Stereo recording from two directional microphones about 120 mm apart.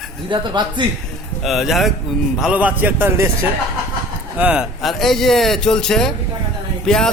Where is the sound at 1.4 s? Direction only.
Centre (ahead or behind); by 3.3 s 20° right (ahead or behind).